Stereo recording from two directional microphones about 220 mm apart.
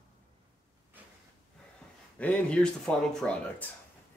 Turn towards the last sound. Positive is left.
turn(degrees=5)  # may be behind; listen again after turning